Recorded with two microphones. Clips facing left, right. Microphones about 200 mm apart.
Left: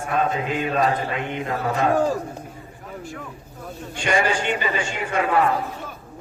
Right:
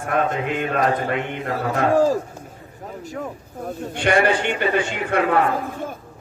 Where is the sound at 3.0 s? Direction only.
40° right (ahead or behind); by 5.2 s 60° right (ahead or behind).